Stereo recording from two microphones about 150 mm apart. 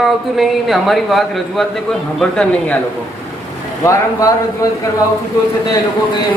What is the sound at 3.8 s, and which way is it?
Speech, 20° left (ahead or behind).